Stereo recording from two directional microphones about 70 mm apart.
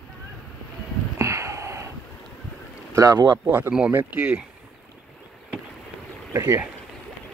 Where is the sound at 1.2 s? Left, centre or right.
Right.